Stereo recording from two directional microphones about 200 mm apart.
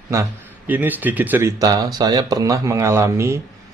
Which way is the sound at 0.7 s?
10° right (ahead or behind).